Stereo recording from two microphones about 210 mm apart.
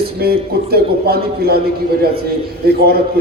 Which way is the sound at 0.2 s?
50° right (ahead or behind).